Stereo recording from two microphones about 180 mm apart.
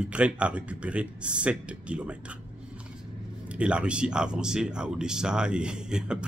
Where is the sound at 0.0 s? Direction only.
5° right (ahead or behind).